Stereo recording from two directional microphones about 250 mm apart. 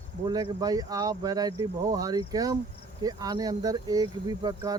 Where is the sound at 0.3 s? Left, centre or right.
Centre.